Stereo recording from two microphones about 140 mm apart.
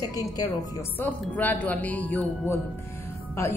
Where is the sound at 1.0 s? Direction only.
10° left (ahead or behind).